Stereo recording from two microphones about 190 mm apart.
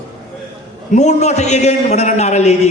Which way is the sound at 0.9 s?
35° left (ahead or behind).